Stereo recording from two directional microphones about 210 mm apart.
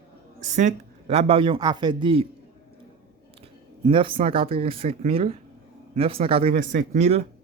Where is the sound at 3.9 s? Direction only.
25° right (ahead or behind).